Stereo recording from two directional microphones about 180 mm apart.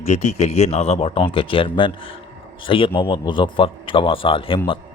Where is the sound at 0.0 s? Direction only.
40° left (ahead or behind).